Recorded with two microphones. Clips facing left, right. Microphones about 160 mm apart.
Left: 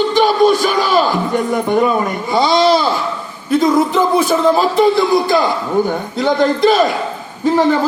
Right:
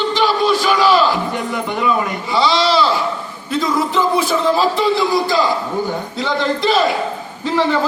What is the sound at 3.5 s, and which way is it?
A man's voice, 50° left (ahead or behind).